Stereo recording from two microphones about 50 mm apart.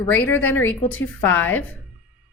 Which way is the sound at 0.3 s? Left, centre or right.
Left.